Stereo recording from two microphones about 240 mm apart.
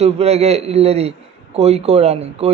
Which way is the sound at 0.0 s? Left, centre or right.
Right.